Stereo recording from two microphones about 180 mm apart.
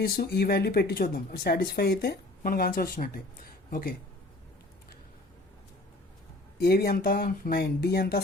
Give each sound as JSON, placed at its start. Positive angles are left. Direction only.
{"t": 0.0, "sound": "speech", "side_deg": 60}
{"t": 6.6, "sound": "speech", "side_deg": 60}